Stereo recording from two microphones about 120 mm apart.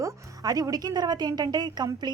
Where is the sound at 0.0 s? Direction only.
30° right (ahead or behind).